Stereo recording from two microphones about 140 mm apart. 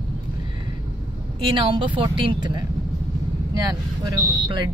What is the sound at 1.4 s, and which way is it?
A woman's voice, 35° right (ahead or behind).